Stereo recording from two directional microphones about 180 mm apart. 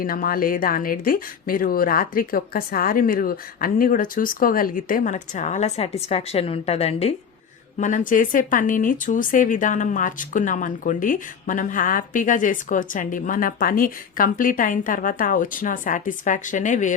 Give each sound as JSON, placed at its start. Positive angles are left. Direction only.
{"t": 0.0, "sound": "speech", "side_deg": 50}